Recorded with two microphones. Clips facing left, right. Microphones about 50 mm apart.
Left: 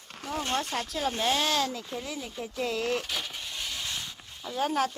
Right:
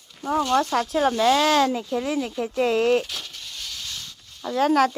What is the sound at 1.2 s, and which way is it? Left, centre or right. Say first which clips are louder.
Speech: right 8 dB; right.